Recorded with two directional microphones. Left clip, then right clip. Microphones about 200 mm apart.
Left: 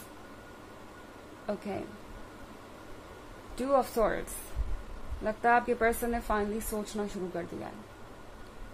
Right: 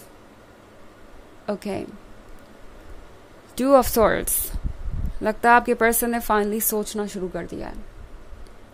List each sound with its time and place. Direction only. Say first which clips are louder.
1.4 s a woman's voice: right 8 dB; 50° right (ahead or behind)
3.5 s a woman's voice: right 11 dB; 50° right (ahead or behind)